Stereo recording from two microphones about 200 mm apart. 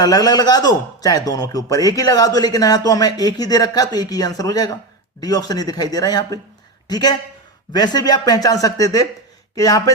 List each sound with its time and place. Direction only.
0.0 s a man's voice: 20° left (ahead or behind)